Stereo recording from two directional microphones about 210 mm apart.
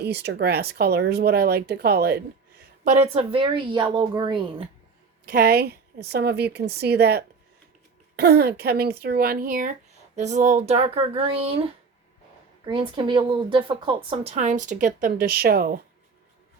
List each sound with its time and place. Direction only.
0.0 s speech: 50° right (ahead or behind)
2.8 s speech: 35° right (ahead or behind)
5.2 s speech: 45° right (ahead or behind)